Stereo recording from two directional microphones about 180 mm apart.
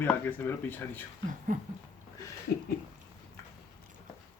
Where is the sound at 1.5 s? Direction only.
45° right (ahead or behind).